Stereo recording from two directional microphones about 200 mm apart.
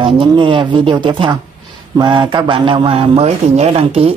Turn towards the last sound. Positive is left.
turn(degrees=-30)  # may be behind; listen again after turning